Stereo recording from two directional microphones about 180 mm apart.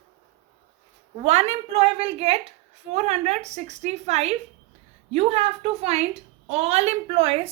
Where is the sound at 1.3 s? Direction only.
40° right (ahead or behind).